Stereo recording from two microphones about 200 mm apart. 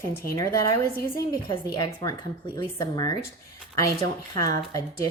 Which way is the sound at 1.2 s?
20° left (ahead or behind).